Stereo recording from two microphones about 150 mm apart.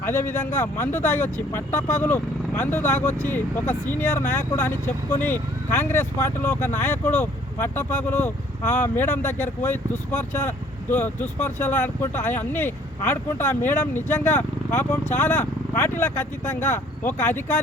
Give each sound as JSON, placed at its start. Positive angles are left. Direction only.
{"t": 0.0, "sound": "speech", "side_deg": 15}